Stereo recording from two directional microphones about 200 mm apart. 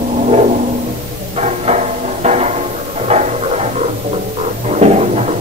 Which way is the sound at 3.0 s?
30° right (ahead or behind).